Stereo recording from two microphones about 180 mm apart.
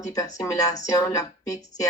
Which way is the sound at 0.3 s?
20° left (ahead or behind).